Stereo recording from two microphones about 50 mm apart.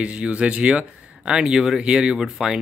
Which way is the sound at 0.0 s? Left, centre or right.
Right.